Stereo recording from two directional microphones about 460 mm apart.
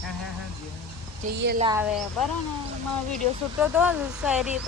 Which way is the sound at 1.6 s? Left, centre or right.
Centre.